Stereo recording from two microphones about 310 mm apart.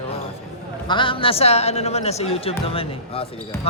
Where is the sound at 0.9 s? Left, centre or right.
Centre.